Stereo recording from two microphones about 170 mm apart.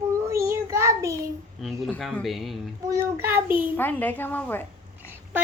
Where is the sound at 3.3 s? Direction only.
15° right (ahead or behind).